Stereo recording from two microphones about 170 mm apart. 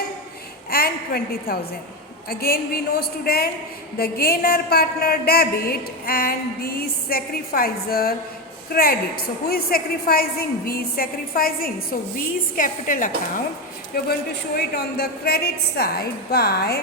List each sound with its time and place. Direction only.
0.7 s a woman's voice: 65° left (ahead or behind)
13.9 s a woman's voice: 65° left (ahead or behind)